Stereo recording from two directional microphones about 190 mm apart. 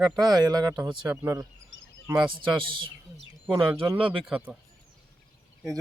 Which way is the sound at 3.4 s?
10° right (ahead or behind).